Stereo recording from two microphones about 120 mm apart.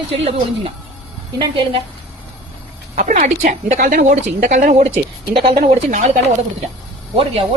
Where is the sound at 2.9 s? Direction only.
90° right.